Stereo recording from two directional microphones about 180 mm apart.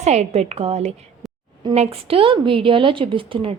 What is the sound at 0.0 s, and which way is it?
A woman's voice, 40° right (ahead or behind).